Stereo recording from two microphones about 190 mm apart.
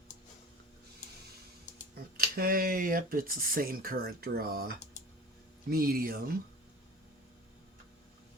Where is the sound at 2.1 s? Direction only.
50° right (ahead or behind).